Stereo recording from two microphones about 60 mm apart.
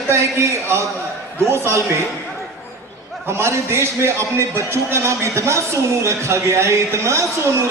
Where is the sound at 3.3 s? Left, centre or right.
Right.